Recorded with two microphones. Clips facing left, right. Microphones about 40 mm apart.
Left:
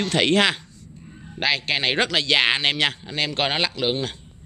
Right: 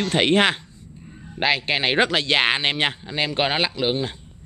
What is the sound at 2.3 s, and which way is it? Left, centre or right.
A man's voice, right.